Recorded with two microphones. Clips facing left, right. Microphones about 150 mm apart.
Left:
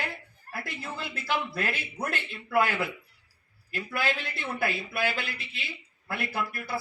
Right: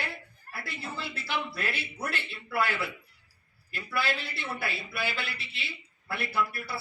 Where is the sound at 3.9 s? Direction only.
45° left (ahead or behind).